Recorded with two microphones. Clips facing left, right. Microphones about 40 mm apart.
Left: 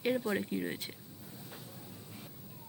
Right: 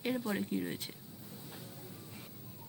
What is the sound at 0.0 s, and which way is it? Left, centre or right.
Speech, centre.